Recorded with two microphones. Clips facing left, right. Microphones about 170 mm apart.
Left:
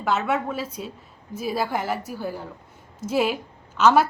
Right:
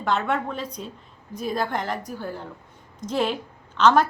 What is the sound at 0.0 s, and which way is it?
A woman's voice, 5° left (ahead or behind).